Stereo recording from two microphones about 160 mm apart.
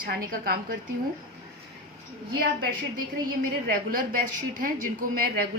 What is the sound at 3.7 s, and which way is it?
Speech, 65° right (ahead or behind).